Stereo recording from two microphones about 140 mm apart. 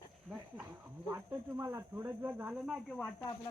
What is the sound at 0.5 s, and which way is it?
Speech, 15° right (ahead or behind).